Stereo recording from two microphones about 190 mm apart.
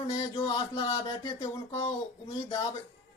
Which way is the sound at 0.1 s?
25° left (ahead or behind).